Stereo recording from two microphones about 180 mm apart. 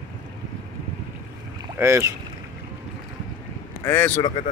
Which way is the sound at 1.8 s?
15° right (ahead or behind).